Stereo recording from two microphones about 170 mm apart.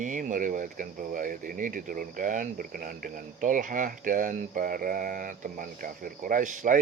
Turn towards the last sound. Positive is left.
turn(degrees=-50)  # may be behind; listen again after turning